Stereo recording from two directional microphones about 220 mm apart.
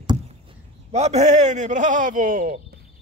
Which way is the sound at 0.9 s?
30° right (ahead or behind).